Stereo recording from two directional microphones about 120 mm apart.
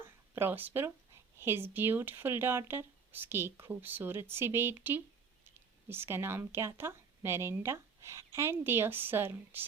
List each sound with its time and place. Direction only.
0.0 s a woman's voice: 20° right (ahead or behind)